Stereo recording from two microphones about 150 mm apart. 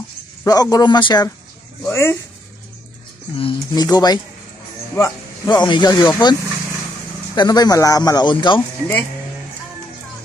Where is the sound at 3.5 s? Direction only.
25° left (ahead or behind).